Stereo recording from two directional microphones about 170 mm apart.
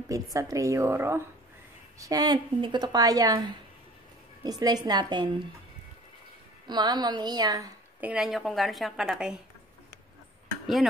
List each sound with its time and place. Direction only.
0.1 s a woman's voice: 20° right (ahead or behind)
6.7 s a woman's voice: 25° right (ahead or behind)
8.0 s a woman's voice: 5° right (ahead or behind)